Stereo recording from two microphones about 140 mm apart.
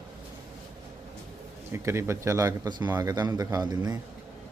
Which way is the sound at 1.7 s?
20° right (ahead or behind).